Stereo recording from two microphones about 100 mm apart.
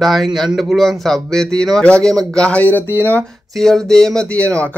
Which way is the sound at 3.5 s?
5° left (ahead or behind).